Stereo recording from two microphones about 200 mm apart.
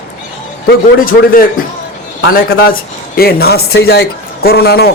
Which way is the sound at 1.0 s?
45° left (ahead or behind).